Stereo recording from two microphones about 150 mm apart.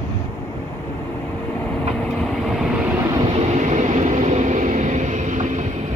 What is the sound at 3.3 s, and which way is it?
Vehicle, 50° right (ahead or behind).